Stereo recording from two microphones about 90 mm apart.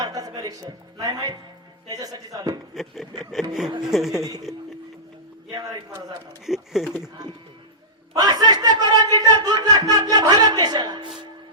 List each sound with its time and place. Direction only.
0.0 s music: 40° right (ahead or behind)
0.9 s speech: 50° right (ahead or behind)
2.7 s speech: centre (ahead or behind)
6.4 s speech: 5° right (ahead or behind)
8.1 s speech: 50° right (ahead or behind)